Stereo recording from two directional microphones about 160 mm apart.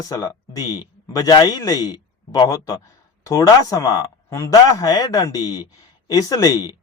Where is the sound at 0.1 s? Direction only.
20° left (ahead or behind).